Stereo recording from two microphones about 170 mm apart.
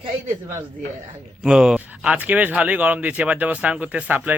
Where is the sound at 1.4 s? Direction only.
5° right (ahead or behind).